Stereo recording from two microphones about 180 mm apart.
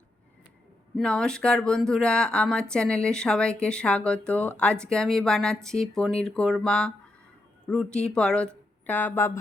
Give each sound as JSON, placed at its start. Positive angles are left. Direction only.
{"t": 0.9, "sound": "speech", "side_deg": 5}